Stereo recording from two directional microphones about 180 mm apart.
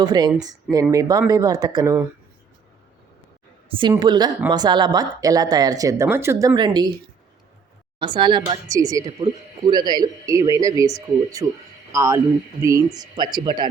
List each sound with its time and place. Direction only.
0.0 s speech: 20° right (ahead or behind)
3.7 s a woman's voice: 30° right (ahead or behind)
7.9 s speech: 25° right (ahead or behind)